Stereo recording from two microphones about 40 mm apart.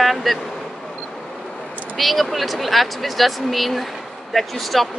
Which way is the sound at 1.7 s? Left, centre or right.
Right.